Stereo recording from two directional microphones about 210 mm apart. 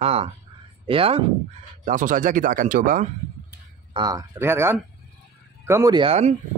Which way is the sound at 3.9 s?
20° right (ahead or behind).